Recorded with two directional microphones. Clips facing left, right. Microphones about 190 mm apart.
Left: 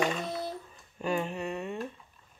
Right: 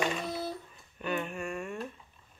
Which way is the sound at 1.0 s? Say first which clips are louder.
Left 3 dB; 30° left (ahead or behind).